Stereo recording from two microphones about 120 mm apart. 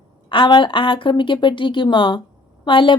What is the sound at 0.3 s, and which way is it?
Speech, 45° left (ahead or behind).